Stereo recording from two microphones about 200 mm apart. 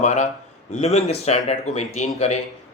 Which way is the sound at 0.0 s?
35° left (ahead or behind).